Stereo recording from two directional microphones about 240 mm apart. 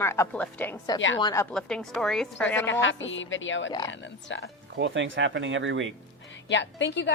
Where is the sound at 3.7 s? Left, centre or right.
Centre.